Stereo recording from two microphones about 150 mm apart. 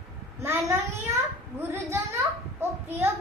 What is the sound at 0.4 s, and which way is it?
Speech, 20° right (ahead or behind).